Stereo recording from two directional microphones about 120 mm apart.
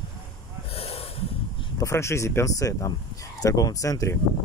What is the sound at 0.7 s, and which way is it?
Snort, 55° left (ahead or behind).